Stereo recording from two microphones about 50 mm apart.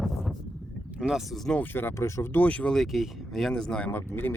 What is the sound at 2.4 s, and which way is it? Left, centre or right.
Speech, left.